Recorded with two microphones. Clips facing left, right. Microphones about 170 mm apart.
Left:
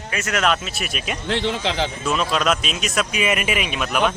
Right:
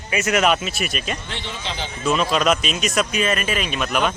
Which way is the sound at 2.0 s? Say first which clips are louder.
Right 4 dB; centre (ahead or behind).